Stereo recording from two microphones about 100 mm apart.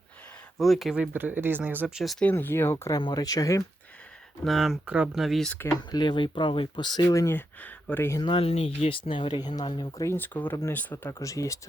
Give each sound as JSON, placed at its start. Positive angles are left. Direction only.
{"t": 0.6, "sound": "speech", "side_deg": 0}
{"t": 1.1, "sound": "speech", "side_deg": -20}
{"t": 2.0, "sound": "speech", "side_deg": 0}
{"t": 2.3, "sound": "speech", "side_deg": 25}
{"t": 3.0, "sound": "speech", "side_deg": 40}
{"t": 4.4, "sound": "speech", "side_deg": 0}
{"t": 5.9, "sound": "speech", "side_deg": 50}
{"t": 7.1, "sound": "speech", "side_deg": 30}
{"t": 7.3, "sound": "speech", "side_deg": 20}
{"t": 8.2, "sound": "speech", "side_deg": 65}
{"t": 10.0, "sound": "speech", "side_deg": 25}
{"t": 11.2, "sound": "speech", "side_deg": 35}